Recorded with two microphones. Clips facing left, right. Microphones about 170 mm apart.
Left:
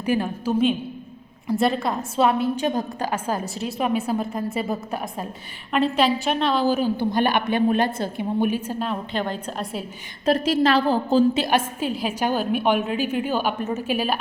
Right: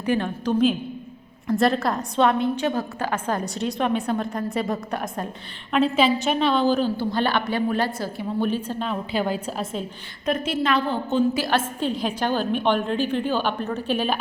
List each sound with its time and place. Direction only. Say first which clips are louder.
0.0 s a woman's voice: even; 10° left (ahead or behind)
6.9 s a woman's voice: left 2 dB; 15° left (ahead or behind); by 9.6 s 5° right (ahead or behind)
10.2 s a woman's voice: left 4 dB; 35° left (ahead or behind)
11.3 s a woman's voice: left 1 dB; 15° left (ahead or behind)